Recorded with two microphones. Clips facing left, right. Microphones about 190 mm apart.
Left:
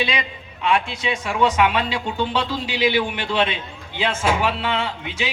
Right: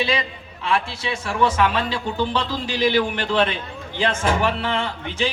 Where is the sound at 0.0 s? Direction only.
15° left (ahead or behind).